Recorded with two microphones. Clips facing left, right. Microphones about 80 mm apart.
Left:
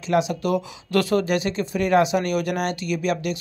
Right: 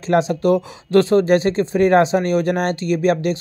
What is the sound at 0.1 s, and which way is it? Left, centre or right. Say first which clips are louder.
Speech: right 5 dB; right.